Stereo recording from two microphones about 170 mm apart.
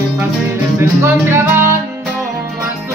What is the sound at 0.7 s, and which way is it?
Music, 15° right (ahead or behind).